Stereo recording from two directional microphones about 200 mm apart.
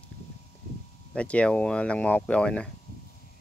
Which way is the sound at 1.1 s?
5° left (ahead or behind).